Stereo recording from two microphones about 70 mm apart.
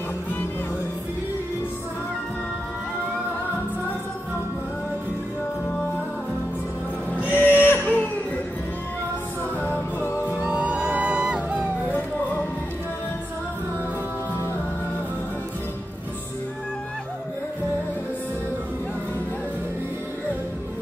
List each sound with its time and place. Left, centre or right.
7.1 s music: left
9.6 s music: left
10.4 s music: centre